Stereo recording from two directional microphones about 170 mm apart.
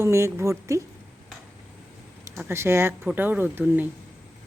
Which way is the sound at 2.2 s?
15° right (ahead or behind).